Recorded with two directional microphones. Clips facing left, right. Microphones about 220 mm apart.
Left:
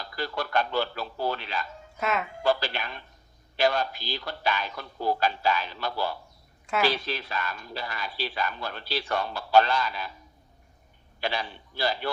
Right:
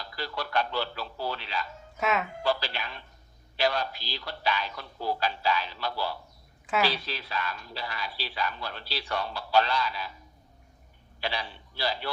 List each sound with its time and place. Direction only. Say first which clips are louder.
0.2 s speech: left 2 dB; 50° left (ahead or behind)
2.0 s speech: right 1 dB; centre (ahead or behind)
2.4 s a sound: left 3 dB; 50° left (ahead or behind)
3.6 s speech: left 3 dB; 50° left (ahead or behind)
11.2 s a man's voice: left 3 dB; 50° left (ahead or behind)